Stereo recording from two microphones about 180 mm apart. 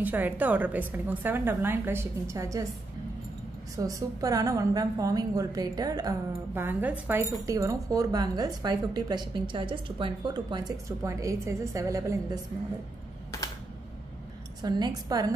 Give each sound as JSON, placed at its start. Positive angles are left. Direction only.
{"t": 0.0, "sound": "a woman's voice", "side_deg": -10}
{"t": 3.7, "sound": "speech", "side_deg": -20}
{"t": 14.6, "sound": "speech", "side_deg": -25}